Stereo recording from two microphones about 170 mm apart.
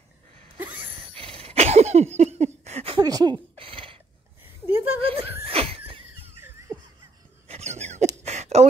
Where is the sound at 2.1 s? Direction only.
40° right (ahead or behind).